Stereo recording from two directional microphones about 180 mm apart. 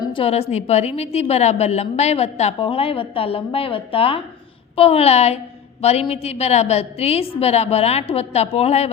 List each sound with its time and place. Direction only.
0.0 s a woman's voice: 30° left (ahead or behind)